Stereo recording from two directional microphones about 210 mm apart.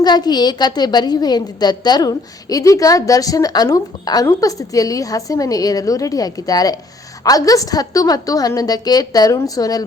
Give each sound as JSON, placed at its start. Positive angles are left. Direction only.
{"t": 0.0, "sound": "a woman's voice", "side_deg": 20}